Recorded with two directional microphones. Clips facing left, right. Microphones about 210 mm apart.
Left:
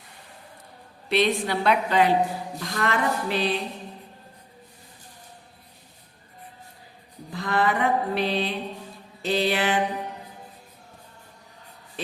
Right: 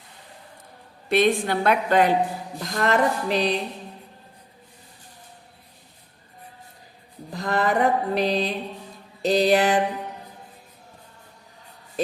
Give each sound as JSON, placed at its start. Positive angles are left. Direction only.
{"t": 1.1, "sound": "a woman's voice", "side_deg": -50}
{"t": 2.6, "sound": "mantra", "side_deg": -40}
{"t": 7.3, "sound": "mantra", "side_deg": -40}